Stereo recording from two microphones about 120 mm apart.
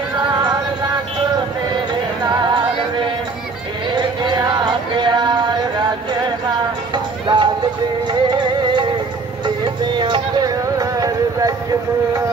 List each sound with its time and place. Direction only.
0.3 s music: 35° right (ahead or behind)
2.2 s music: 40° right (ahead or behind)
3.9 s music: 40° right (ahead or behind)
6.9 s music: 40° right (ahead or behind)
9.9 s music: 40° right (ahead or behind)